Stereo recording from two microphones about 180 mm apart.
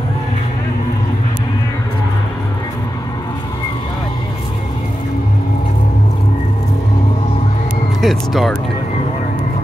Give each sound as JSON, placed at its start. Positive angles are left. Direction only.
{"t": 8.0, "sound": "speech", "side_deg": 0}